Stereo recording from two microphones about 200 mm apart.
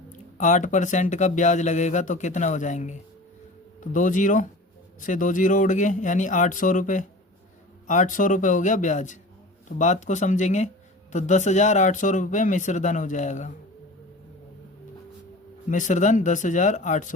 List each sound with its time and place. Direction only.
0.1 s speech: 35° left (ahead or behind)
15.7 s speech: 40° left (ahead or behind)